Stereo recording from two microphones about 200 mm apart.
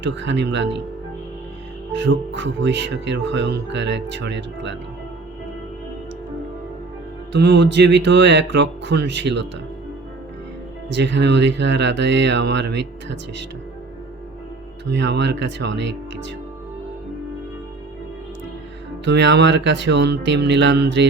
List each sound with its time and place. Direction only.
0.0 s speech: 65° right (ahead or behind)
1.9 s speech: 65° right (ahead or behind)
7.3 s speech: 60° right (ahead or behind)
10.8 s speech: 60° right (ahead or behind)
14.8 s speech: 60° right (ahead or behind)
19.0 s speech: 60° right (ahead or behind)